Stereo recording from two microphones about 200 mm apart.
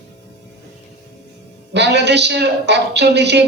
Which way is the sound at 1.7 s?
60° right (ahead or behind).